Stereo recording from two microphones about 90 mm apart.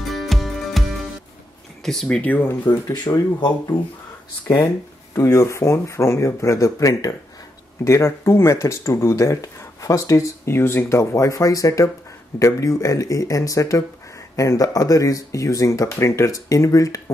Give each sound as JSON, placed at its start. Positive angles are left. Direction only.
{"t": 0.1, "sound": "music", "side_deg": 0}
{"t": 1.9, "sound": "speech", "side_deg": 5}
{"t": 2.2, "sound": "speech", "side_deg": 20}
{"t": 2.6, "sound": "speech", "side_deg": 50}
{"t": 5.1, "sound": "speech", "side_deg": 35}